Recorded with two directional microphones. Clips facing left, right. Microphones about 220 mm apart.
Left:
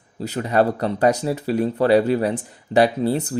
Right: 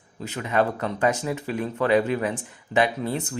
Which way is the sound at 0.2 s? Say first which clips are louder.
Left 5 dB; 35° left (ahead or behind).